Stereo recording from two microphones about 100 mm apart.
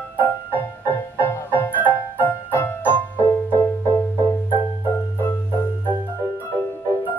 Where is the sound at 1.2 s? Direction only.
20° left (ahead or behind).